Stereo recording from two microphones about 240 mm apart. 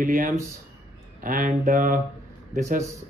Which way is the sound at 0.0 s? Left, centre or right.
Right.